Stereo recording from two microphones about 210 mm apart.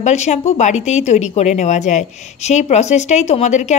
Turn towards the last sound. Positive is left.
turn(degrees=35)  # may be behind; listen again after turning